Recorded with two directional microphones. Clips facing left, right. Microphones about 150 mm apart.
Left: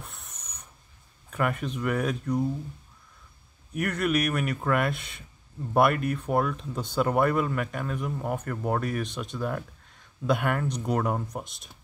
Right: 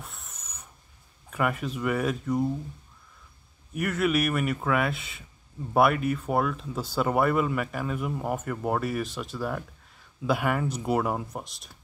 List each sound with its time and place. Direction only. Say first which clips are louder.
0.0 s hiss: right 1 dB; centre (ahead or behind)
1.3 s speech: even; centre (ahead or behind)
3.7 s speech: right 1 dB; centre (ahead or behind)